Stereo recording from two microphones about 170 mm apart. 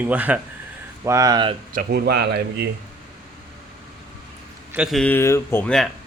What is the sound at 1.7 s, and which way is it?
A man's voice, 60° right (ahead or behind).